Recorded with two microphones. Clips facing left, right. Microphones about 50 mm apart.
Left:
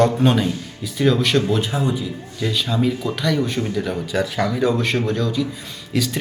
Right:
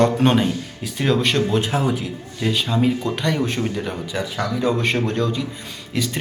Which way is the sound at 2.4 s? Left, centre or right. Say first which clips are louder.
Right 1 dB; right.